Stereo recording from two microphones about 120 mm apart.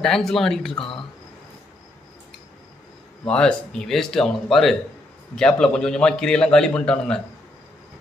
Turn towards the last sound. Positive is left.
turn(degrees=5)  # may be behind; listen again after turning